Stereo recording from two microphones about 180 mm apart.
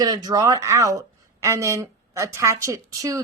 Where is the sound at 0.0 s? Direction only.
20° right (ahead or behind).